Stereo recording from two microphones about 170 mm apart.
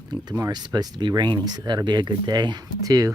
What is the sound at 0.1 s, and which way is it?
Speech, 20° right (ahead or behind).